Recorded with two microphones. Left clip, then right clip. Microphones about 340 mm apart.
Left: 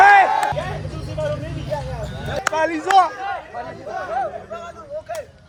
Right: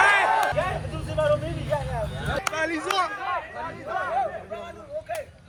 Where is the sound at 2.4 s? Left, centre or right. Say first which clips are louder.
Left 8 dB; left.